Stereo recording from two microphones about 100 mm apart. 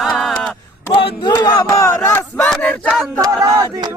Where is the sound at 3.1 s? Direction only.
30° right (ahead or behind).